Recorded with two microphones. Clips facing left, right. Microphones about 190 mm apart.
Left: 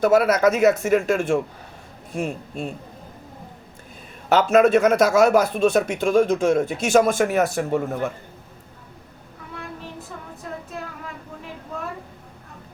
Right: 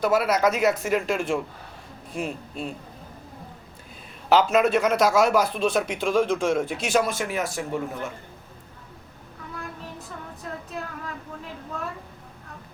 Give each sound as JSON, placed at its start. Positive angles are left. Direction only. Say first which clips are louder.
{"t": 0.0, "sound": "speech", "louder": "left 5 dB", "side_deg": 50}
{"t": 4.3, "sound": "speech", "louder": "left 4 dB", "side_deg": 45}